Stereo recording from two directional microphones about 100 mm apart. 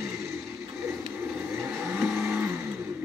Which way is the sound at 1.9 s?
25° right (ahead or behind).